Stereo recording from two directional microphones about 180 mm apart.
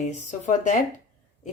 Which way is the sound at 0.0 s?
40° left (ahead or behind).